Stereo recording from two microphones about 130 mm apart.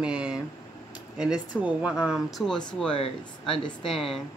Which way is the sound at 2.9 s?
45° left (ahead or behind).